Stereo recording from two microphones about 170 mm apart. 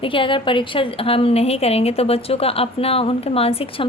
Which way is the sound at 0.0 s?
30° left (ahead or behind).